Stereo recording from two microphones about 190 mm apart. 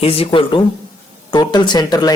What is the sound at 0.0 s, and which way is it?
Speech, 30° left (ahead or behind).